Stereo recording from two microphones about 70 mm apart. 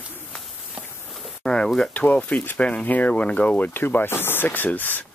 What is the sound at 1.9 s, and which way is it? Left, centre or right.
Speech, left.